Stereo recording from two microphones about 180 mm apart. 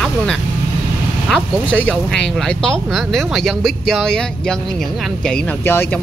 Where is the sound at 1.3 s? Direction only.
5° left (ahead or behind).